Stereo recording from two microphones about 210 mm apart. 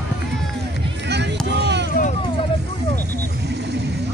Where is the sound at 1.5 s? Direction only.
55° right (ahead or behind).